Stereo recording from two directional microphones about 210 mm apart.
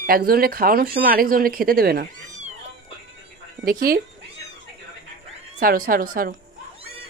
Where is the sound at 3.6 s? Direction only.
45° right (ahead or behind).